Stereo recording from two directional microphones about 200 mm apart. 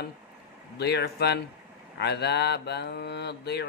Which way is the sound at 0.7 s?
55° left (ahead or behind).